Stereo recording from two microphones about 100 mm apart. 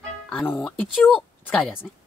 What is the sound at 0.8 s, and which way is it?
Speech, 15° left (ahead or behind).